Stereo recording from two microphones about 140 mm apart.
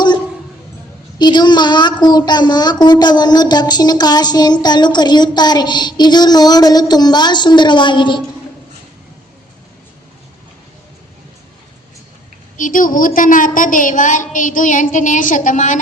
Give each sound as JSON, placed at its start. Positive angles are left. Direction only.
{"t": 1.2, "sound": "a child's voice", "side_deg": 30}
{"t": 12.5, "sound": "a woman's voice", "side_deg": 70}